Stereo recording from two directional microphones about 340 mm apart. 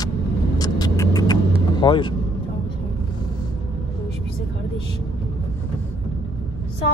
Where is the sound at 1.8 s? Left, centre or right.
Centre.